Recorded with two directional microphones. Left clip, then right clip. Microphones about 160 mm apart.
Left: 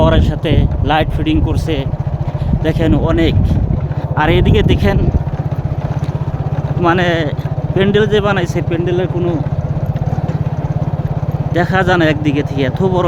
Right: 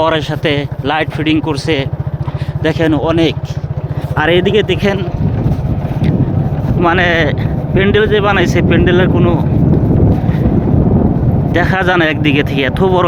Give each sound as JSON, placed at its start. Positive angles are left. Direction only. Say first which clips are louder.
{"t": 0.0, "sound": "speech", "louder": "right 1 dB", "side_deg": 10}
{"t": 6.8, "sound": "speech", "louder": "right 3 dB", "side_deg": 20}
{"t": 8.4, "sound": "speech", "louder": "right 6 dB", "side_deg": 5}
{"t": 11.5, "sound": "speech", "louder": "right 1 dB", "side_deg": 15}